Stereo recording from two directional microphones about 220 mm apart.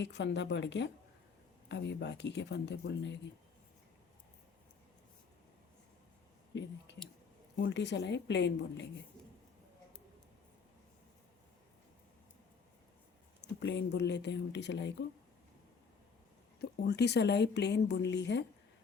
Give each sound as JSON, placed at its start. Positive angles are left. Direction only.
{"t": 0.0, "sound": "a woman's voice", "side_deg": 50}
{"t": 6.5, "sound": "a sound", "side_deg": 55}
{"t": 7.6, "sound": "a woman's voice", "side_deg": 55}
{"t": 13.4, "sound": "a woman's voice", "side_deg": 55}
{"t": 16.6, "sound": "a woman's voice", "side_deg": 50}